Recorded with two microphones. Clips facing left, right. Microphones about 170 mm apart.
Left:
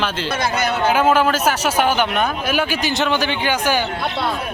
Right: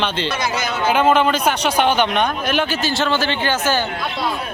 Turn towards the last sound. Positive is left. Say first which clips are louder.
# even
turn(degrees=15)  # may be behind; listen again after turning